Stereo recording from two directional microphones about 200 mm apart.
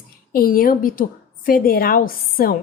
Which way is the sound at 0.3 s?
45° left (ahead or behind).